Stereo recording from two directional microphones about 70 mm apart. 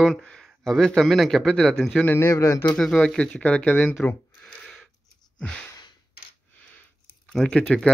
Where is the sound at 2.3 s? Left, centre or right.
Left.